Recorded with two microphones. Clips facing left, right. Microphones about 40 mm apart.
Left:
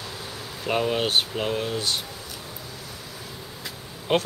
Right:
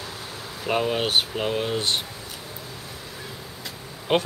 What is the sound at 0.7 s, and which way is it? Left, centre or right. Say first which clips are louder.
Speech: even; centre.